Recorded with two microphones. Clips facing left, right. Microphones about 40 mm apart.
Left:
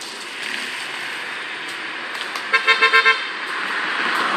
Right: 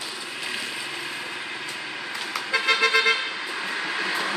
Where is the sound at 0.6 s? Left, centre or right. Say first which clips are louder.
Left 4 dB; left.